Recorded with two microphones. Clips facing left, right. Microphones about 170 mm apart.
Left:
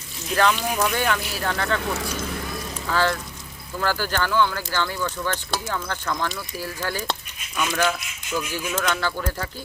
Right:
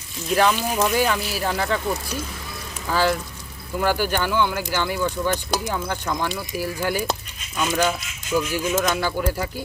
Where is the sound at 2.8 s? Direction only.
10° right (ahead or behind).